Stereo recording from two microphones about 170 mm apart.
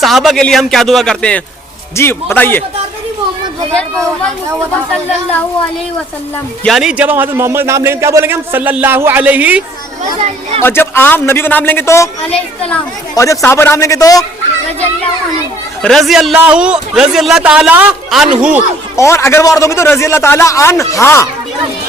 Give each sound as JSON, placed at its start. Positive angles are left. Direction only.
{"t": 0.0, "sound": "a man's voice", "side_deg": 0}
{"t": 6.7, "sound": "a man's voice", "side_deg": -5}
{"t": 10.6, "sound": "a man's voice", "side_deg": 15}
{"t": 13.1, "sound": "a man's voice", "side_deg": 20}
{"t": 15.8, "sound": "a man's voice", "side_deg": 0}
{"t": 18.9, "sound": "a man's voice", "side_deg": 15}